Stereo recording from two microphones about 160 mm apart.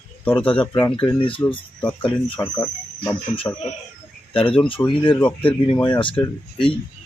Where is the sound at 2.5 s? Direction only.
20° left (ahead or behind).